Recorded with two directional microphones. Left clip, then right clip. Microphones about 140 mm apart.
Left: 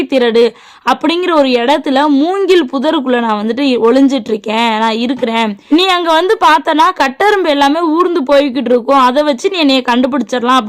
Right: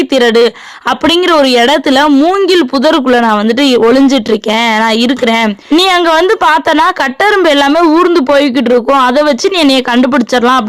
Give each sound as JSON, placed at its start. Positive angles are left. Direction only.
{"t": 0.0, "sound": "speech", "side_deg": -25}
{"t": 2.0, "sound": "speech", "side_deg": -10}
{"t": 2.5, "sound": "speech", "side_deg": -25}